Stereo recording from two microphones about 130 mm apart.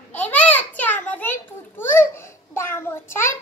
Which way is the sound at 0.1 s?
10° left (ahead or behind).